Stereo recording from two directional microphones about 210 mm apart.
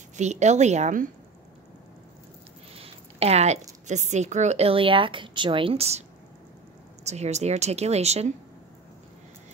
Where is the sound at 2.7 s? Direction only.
30° right (ahead or behind).